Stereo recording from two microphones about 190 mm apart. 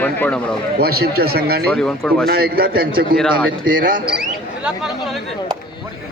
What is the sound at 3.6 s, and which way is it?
Speech, 45° right (ahead or behind).